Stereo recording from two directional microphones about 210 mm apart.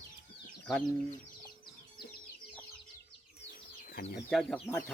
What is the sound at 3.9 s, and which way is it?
Speech, 40° left (ahead or behind).